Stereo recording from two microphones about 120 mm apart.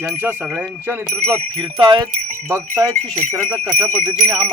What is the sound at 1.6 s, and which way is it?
Speech, 40° right (ahead or behind).